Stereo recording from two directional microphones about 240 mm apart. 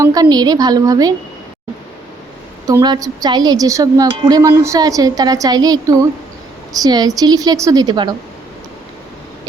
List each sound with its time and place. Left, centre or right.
0.0 s a woman's voice: centre
2.6 s a woman's voice: centre